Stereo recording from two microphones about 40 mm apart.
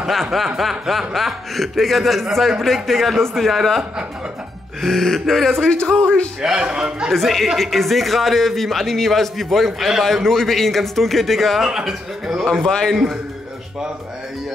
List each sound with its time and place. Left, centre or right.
0.2 s a man's voice: centre
4.8 s a man's voice: centre
5.7 s speech: left
6.4 s a man's voice: centre
7.1 s a man's voice: centre
10.0 s a man's voice: centre
11.6 s a man's voice: centre
12.6 s a man's voice: centre